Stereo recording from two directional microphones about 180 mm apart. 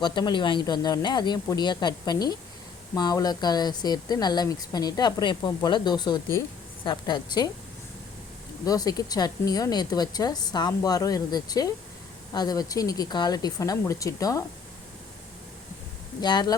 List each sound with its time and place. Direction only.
0.0 s speech: 25° left (ahead or behind)
8.6 s speech: 20° left (ahead or behind)
16.2 s speech: 25° left (ahead or behind)